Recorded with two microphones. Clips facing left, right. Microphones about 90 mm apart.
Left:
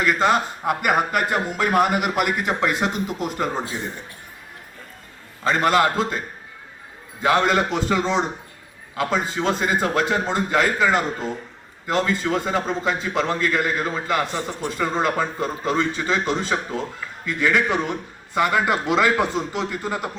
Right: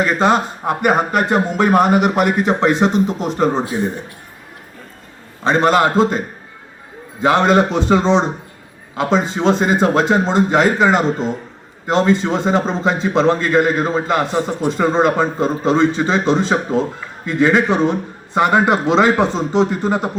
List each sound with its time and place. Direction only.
0.0 s a man's voice: 25° right (ahead or behind)
5.4 s a man's voice: 25° right (ahead or behind)